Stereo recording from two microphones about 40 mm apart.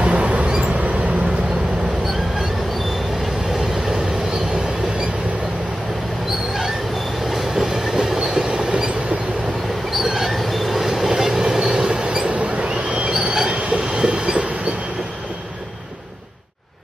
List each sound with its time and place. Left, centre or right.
0.0 s vehicle: right
7.2 s train: centre
8.2 s train: centre
10.0 s train: centre
12.3 s a sound: right
13.1 s train: centre